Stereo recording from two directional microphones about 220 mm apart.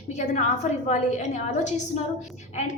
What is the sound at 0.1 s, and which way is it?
A woman's voice, 30° left (ahead or behind).